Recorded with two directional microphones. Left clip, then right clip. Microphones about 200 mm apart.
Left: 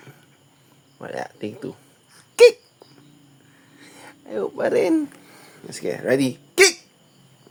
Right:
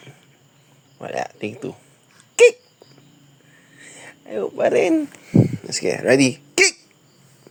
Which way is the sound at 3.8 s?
5° left (ahead or behind).